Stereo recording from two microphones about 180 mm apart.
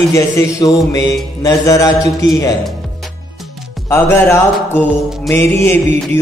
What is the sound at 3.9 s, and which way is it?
A man's voice, 15° left (ahead or behind).